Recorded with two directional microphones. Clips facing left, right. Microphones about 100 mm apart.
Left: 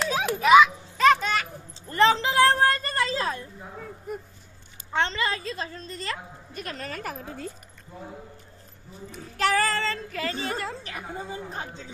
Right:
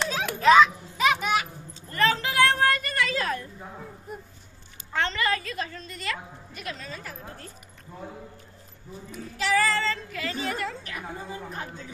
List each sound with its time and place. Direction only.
0.1 s children playing: 15° left (ahead or behind)
0.9 s children playing: 10° right (ahead or behind)
1.7 s a sound: 25° left (ahead or behind)
4.9 s a woman's voice: 25° left (ahead or behind); by 7.2 s 75° left (ahead or behind)
9.1 s speech: 50° left (ahead or behind); by 11.8 s 25° left (ahead or behind)